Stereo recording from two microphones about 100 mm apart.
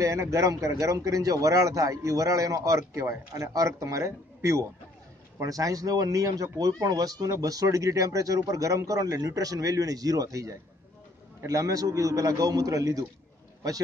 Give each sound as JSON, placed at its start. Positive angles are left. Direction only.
{"t": 0.0, "sound": "speech", "side_deg": -30}